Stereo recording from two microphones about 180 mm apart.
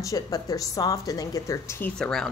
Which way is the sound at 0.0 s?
20° left (ahead or behind).